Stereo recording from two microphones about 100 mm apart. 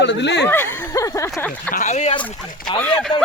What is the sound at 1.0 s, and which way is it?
Speech, 35° left (ahead or behind).